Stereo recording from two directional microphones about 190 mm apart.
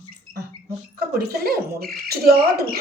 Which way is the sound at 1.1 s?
55° right (ahead or behind).